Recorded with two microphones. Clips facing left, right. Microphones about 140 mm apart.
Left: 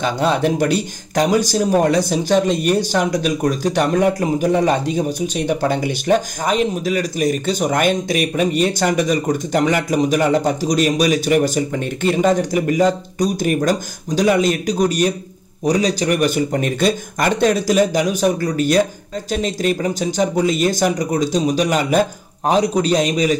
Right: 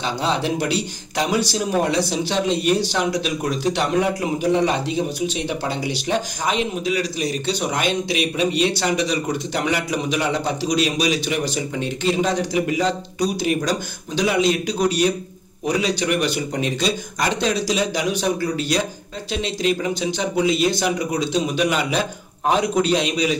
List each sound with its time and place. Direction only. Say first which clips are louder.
0.0 s a man's voice: left 5 dB; 55° left (ahead or behind)